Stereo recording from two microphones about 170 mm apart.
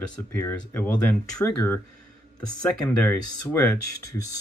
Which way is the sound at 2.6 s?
5° left (ahead or behind).